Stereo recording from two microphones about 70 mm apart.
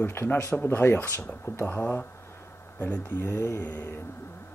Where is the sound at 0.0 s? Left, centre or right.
Left.